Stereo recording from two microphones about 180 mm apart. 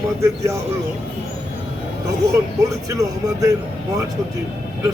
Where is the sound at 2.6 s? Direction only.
20° right (ahead or behind).